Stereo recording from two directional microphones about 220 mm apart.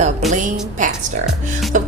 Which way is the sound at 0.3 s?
35° right (ahead or behind).